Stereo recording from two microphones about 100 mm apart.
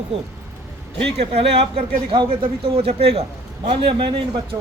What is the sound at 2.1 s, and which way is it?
Speech, 60° right (ahead or behind).